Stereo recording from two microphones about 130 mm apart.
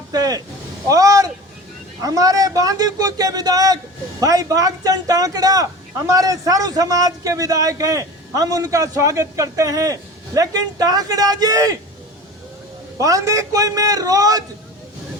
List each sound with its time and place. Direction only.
0.1 s a man's voice: 30° right (ahead or behind)
13.0 s a man's voice: 25° right (ahead or behind)